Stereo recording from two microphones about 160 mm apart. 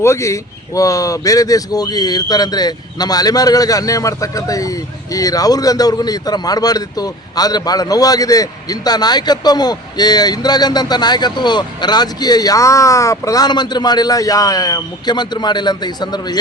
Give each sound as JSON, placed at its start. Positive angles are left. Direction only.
{"t": 0.0, "sound": "speech", "side_deg": 20}